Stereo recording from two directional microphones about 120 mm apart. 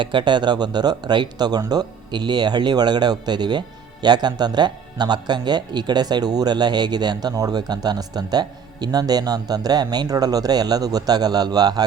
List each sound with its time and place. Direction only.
0.0 s speech: 40° right (ahead or behind)